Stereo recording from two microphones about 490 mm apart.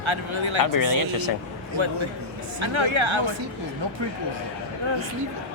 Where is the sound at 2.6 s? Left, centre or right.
Right.